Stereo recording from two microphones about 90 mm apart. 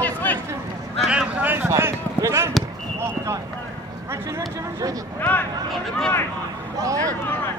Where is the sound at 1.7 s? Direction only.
30° right (ahead or behind).